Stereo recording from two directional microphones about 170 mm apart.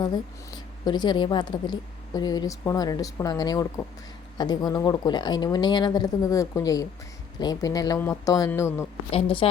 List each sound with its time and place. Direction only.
0.0 s speech: 25° left (ahead or behind)
9.1 s a woman's voice: 30° left (ahead or behind)